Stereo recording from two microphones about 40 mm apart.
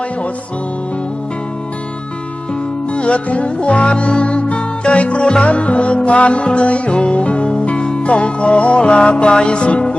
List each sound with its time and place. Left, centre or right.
2.9 s music: left